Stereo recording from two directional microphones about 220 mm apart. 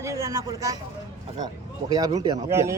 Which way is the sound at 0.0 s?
15° right (ahead or behind).